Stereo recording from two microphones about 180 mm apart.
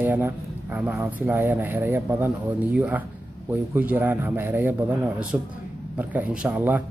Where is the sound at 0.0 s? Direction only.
10° right (ahead or behind).